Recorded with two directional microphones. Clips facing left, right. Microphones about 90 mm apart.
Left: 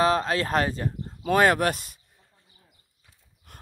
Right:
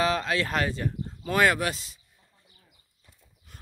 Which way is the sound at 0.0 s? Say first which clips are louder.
Left 3 dB; 40° left (ahead or behind).